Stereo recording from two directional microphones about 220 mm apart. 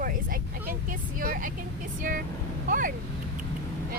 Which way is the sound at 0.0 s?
40° right (ahead or behind).